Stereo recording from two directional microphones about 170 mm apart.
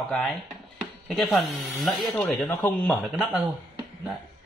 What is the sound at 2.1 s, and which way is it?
Speech, 15° left (ahead or behind).